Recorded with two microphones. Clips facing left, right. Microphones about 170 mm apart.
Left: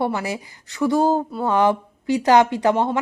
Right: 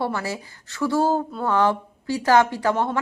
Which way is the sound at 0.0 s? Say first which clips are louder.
Left 3 dB; 15° left (ahead or behind).